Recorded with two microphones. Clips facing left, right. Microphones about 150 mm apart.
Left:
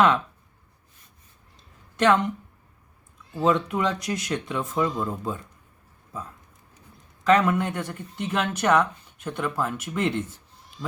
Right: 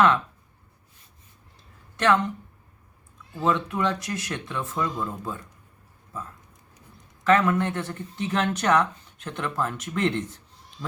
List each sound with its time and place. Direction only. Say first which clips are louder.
2.0 s speech: left 2 dB; 20° left (ahead or behind)
3.3 s speech: left 2 dB; 20° left (ahead or behind)
7.3 s speech: left 1 dB; 15° left (ahead or behind)